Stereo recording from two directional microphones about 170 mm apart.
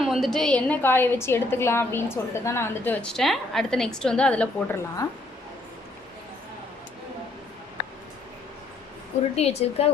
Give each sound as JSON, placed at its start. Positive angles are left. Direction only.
{"t": 0.0, "sound": "a woman's voice", "side_deg": 0}
{"t": 9.3, "sound": "speech", "side_deg": 40}